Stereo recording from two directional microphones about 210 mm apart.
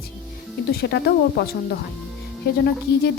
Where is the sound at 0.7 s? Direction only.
50° left (ahead or behind).